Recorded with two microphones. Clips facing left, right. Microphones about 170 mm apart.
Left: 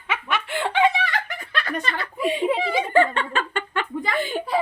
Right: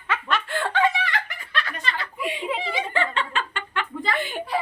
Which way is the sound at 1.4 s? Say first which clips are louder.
Left 4 dB; 45° left (ahead or behind).